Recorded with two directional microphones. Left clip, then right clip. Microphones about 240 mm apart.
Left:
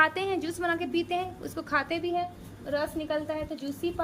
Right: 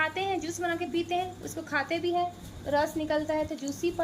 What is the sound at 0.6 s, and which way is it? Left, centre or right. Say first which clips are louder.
A woman's voice: left 3 dB; centre.